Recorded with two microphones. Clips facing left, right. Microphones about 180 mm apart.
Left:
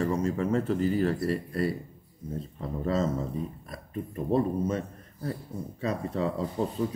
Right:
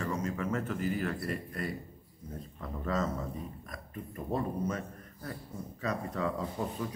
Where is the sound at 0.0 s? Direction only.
30° left (ahead or behind).